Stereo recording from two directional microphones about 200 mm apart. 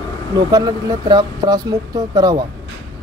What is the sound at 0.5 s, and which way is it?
Speech, 15° right (ahead or behind).